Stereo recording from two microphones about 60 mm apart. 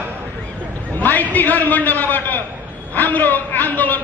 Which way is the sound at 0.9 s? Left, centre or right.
Left.